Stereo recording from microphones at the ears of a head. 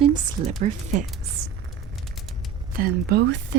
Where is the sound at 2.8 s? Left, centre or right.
Right.